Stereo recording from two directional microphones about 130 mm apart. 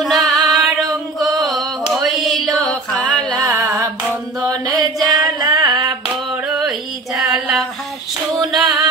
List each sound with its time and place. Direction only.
0.0 s music: centre (ahead or behind)
0.5 s a sound: centre (ahead or behind)
3.4 s music: 25° right (ahead or behind)
4.4 s carnatic music: 30° right (ahead or behind)
5.0 s female singing: 30° right (ahead or behind)
6.3 s a sound: 10° right (ahead or behind)
8.4 s female singing: centre (ahead or behind)